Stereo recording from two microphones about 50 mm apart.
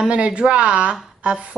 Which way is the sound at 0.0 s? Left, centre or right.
Right.